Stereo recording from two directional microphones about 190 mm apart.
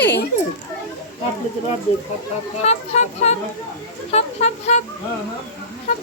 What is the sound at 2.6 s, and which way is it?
Speech, 35° left (ahead or behind).